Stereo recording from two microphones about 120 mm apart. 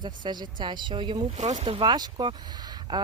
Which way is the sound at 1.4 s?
75° right (ahead or behind).